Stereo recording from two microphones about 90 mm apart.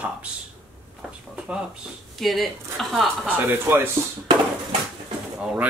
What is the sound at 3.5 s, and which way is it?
Speech, 25° right (ahead or behind).